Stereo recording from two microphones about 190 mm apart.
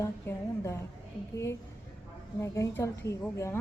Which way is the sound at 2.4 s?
15° left (ahead or behind).